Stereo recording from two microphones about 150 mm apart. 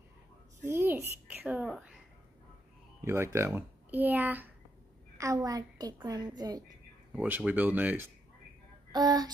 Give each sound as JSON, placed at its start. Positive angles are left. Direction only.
{"t": 0.7, "sound": "a sound", "side_deg": -15}
{"t": 3.0, "sound": "a child's voice", "side_deg": -15}
{"t": 7.2, "sound": "speech", "side_deg": -10}
{"t": 8.9, "sound": "a woman's voice", "side_deg": -25}